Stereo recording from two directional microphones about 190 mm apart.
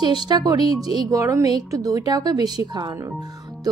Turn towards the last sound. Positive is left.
turn(degrees=-15)  # may be behind; listen again after turning